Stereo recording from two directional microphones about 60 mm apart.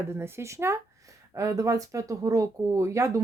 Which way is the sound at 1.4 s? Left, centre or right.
Right.